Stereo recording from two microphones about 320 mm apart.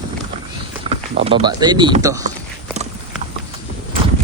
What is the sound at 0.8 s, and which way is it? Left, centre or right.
Speech, centre.